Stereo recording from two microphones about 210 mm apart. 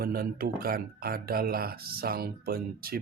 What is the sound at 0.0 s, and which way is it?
Speech, 45° right (ahead or behind).